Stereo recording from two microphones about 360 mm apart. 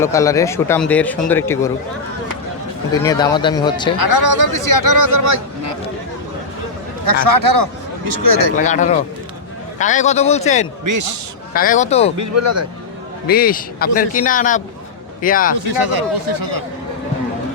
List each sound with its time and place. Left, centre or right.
0.0 s a man's voice: centre
3.0 s a man's voice: centre
4.1 s speech: right
4.5 s speech: right
7.0 s speech: right
8.5 s speech: left
10.8 s speech: right
11.5 s speech: left
12.1 s speech: right
13.2 s speech: left
15.5 s speech: right